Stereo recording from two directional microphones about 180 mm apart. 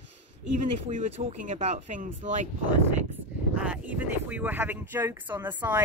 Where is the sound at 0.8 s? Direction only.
40° right (ahead or behind).